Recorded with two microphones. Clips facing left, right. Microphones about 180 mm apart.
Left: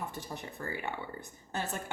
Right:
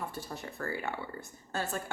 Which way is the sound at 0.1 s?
20° left (ahead or behind).